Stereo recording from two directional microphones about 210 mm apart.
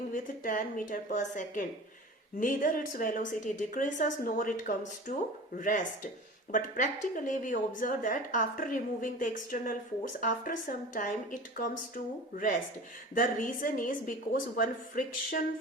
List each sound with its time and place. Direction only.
0.1 s a woman's voice: 40° left (ahead or behind)
13.1 s a woman's voice: 40° left (ahead or behind)